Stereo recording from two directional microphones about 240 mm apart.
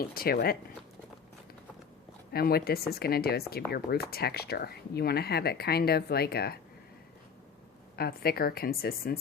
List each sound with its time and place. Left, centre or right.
0.1 s speech: left
2.3 s speech: left
7.9 s speech: left